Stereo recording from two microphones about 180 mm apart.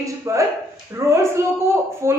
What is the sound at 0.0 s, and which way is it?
A woman's voice, 15° right (ahead or behind).